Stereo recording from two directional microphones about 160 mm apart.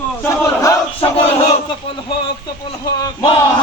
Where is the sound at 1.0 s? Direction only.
40° left (ahead or behind).